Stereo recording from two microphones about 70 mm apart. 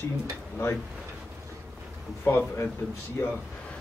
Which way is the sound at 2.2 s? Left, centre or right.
Left.